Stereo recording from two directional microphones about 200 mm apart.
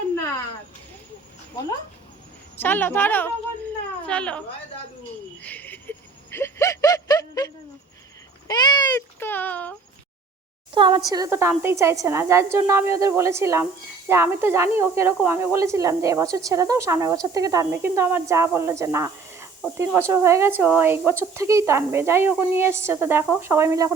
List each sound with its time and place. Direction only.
2.6 s a woman's voice: 10° left (ahead or behind)
5.4 s a sound: 10° left (ahead or behind)
8.4 s speech: 20° left (ahead or behind)
9.1 s a woman's voice: 10° left (ahead or behind)
10.8 s speech: 20° right (ahead or behind)